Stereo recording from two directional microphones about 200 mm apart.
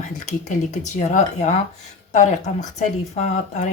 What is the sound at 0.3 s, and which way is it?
Speech, 35° left (ahead or behind).